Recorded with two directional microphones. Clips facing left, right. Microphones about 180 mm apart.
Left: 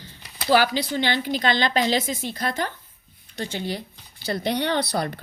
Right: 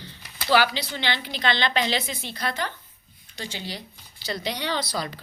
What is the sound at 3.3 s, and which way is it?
Speech, 55° left (ahead or behind).